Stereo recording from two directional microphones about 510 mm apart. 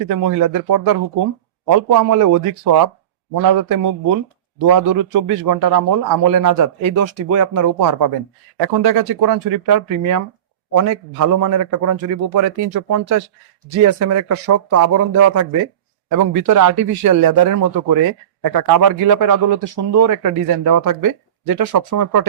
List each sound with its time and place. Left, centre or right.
0.1 s speech: right